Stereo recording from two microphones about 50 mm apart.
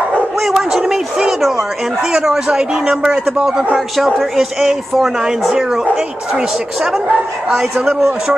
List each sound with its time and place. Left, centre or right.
0.4 s speech: centre
2.8 s speech: right
3.7 s speech: centre